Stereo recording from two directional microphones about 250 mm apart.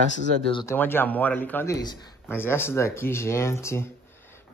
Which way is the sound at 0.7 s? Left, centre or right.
Centre.